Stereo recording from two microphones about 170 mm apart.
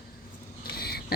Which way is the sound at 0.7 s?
65° left (ahead or behind).